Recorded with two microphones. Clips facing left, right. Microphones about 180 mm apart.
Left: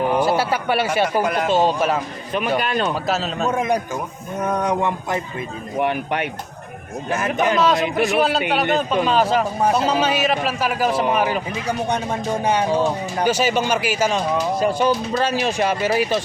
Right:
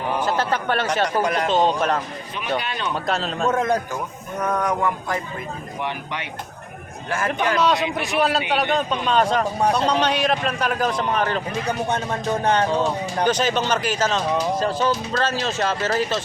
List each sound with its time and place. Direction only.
0.2 s speech: 10° left (ahead or behind)
2.6 s speech: 50° left (ahead or behind)
2.9 s speech: centre (ahead or behind); by 5.2 s 25° left (ahead or behind)
5.8 s speech: 55° left (ahead or behind)
7.6 s speech: centre (ahead or behind)